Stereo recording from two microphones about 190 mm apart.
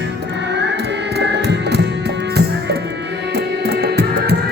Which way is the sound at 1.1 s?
60° right (ahead or behind).